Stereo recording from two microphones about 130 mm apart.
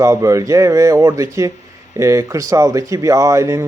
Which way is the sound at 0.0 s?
25° right (ahead or behind).